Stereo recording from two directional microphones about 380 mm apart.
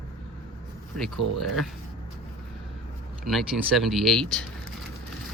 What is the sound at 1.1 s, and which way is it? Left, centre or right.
Speech, right.